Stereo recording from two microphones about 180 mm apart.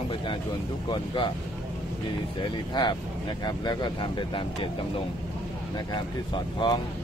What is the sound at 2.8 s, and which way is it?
Speech, 25° left (ahead or behind).